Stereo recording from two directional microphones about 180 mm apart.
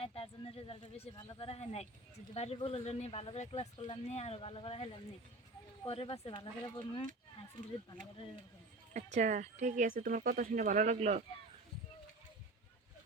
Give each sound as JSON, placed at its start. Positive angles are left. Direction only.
{"t": 0.0, "sound": "a sound", "side_deg": 35}
{"t": 1.2, "sound": "speech", "side_deg": 25}
{"t": 8.9, "sound": "speech", "side_deg": -40}